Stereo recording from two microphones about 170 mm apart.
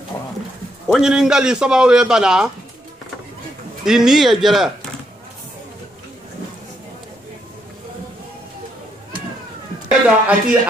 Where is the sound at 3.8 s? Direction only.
5° right (ahead or behind).